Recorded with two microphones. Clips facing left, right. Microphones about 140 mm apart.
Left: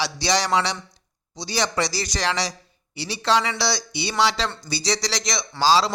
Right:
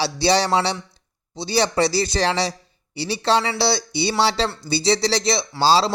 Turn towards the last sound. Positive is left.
turn(degrees=-30)  # may be behind; listen again after turning